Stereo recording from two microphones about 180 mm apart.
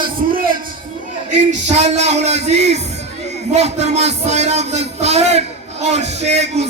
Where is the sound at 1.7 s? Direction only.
40° right (ahead or behind).